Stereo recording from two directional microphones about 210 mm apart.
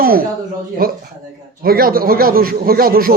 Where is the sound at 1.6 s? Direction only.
45° right (ahead or behind).